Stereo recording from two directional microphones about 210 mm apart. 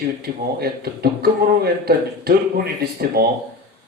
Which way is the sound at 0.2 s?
50° right (ahead or behind).